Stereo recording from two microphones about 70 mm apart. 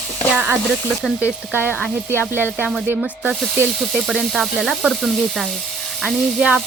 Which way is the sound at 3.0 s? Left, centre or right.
Centre.